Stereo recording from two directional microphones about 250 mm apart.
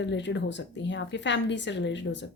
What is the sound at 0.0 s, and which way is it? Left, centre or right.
A woman's voice, left.